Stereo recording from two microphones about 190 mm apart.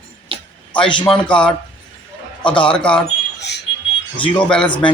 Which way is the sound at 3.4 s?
65° left (ahead or behind).